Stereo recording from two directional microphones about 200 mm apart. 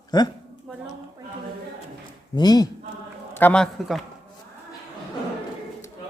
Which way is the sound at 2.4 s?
20° left (ahead or behind).